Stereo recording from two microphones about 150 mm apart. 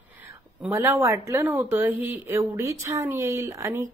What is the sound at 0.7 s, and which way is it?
A woman's voice, 20° right (ahead or behind).